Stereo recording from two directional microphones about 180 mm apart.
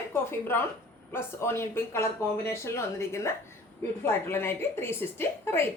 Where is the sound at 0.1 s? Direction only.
15° left (ahead or behind).